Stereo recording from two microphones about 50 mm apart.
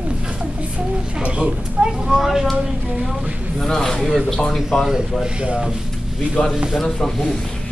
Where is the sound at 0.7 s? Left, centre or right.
Right.